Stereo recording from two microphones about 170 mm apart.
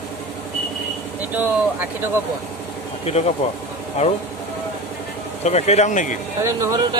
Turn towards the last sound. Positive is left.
turn(degrees=-20)  # may be behind; listen again after turning